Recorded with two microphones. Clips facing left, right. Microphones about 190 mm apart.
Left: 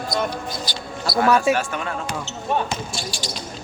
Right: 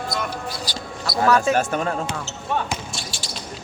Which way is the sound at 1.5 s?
45° right (ahead or behind).